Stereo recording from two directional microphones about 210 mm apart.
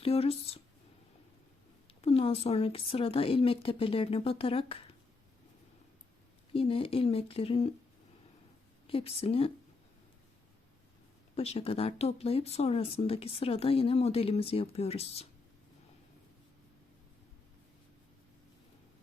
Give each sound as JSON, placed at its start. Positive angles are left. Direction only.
{"t": 0.0, "sound": "speech", "side_deg": 30}
{"t": 1.9, "sound": "speech", "side_deg": 30}
{"t": 6.5, "sound": "speech", "side_deg": 25}
{"t": 8.9, "sound": "speech", "side_deg": 25}
{"t": 11.3, "sound": "speech", "side_deg": 30}